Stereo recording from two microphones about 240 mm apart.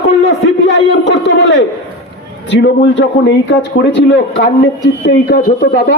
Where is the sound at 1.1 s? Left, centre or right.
Left.